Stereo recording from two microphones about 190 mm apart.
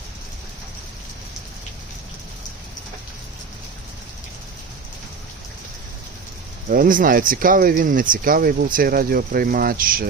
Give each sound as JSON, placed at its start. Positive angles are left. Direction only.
{"t": 6.7, "sound": "speech", "side_deg": -45}